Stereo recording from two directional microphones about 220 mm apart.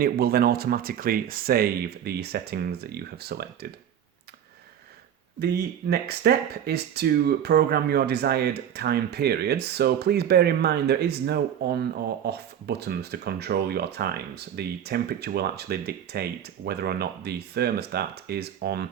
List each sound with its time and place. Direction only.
0.0 s speech: 45° right (ahead or behind)
5.4 s speech: 45° right (ahead or behind)